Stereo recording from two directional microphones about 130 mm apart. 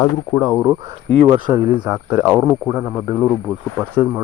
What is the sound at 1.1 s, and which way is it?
Speech, 50° right (ahead or behind).